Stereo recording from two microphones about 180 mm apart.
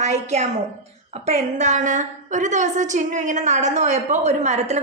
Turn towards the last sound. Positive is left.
turn(degrees=-40)  # may be behind; listen again after turning